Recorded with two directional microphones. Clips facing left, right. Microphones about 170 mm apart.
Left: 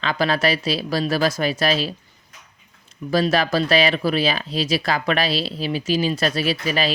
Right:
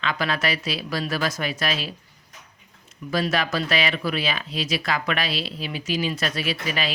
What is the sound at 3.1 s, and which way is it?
Speech, 35° left (ahead or behind).